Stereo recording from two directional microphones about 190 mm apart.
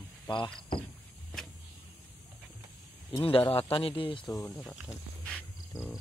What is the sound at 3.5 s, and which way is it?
Speech, 30° left (ahead or behind).